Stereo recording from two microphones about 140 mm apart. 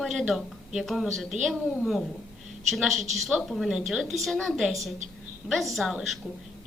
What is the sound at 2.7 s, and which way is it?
A woman's voice, centre (ahead or behind).